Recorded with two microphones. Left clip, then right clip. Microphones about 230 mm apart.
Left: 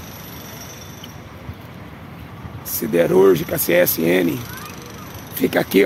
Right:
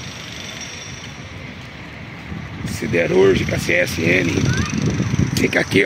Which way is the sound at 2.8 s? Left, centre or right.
Centre.